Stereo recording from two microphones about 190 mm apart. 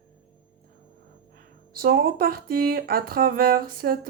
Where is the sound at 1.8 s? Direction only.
50° right (ahead or behind).